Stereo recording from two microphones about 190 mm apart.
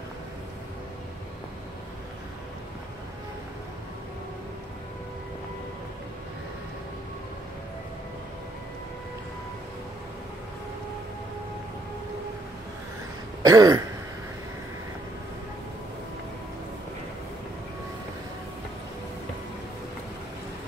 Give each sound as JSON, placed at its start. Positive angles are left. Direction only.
{"t": 13.4, "sound": "throat clearing", "side_deg": -20}